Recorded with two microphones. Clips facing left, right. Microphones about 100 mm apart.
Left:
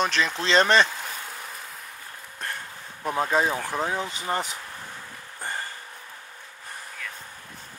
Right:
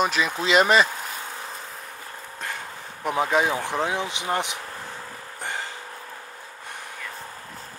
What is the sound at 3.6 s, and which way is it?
Speech, 20° right (ahead or behind).